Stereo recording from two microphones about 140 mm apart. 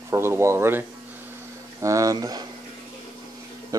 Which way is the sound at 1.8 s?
25° right (ahead or behind).